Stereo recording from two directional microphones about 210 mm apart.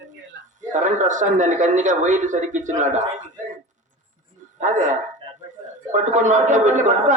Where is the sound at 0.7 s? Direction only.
35° right (ahead or behind).